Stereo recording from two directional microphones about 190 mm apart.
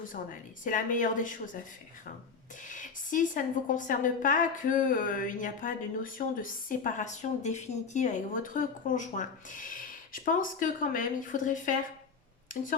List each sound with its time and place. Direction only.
0.6 s speech: 45° left (ahead or behind)
2.6 s speech: 45° left (ahead or behind)